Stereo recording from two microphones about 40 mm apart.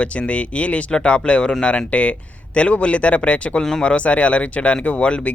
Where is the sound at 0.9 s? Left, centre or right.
Left.